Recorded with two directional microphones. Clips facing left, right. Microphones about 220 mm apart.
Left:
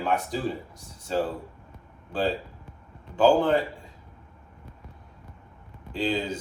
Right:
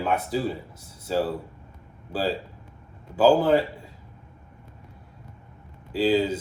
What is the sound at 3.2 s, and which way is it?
Speech, 5° right (ahead or behind).